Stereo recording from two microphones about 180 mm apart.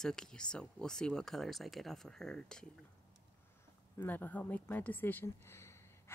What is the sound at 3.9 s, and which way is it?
Speech, 10° left (ahead or behind).